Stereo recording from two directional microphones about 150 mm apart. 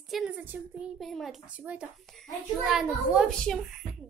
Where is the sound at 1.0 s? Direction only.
Centre (ahead or behind).